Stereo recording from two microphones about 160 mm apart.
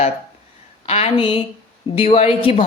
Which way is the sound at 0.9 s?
40° left (ahead or behind).